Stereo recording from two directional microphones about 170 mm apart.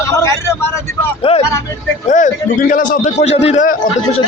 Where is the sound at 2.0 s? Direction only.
50° left (ahead or behind).